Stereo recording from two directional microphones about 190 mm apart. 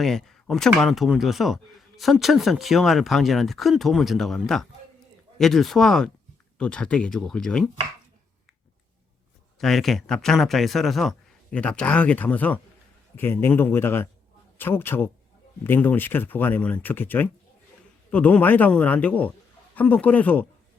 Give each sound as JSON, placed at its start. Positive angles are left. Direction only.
{"t": 0.0, "sound": "speech", "side_deg": 0}
{"t": 9.6, "sound": "speech", "side_deg": 0}